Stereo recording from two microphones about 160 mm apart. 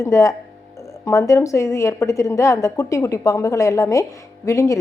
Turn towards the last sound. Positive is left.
turn(degrees=20)  # may be behind; listen again after turning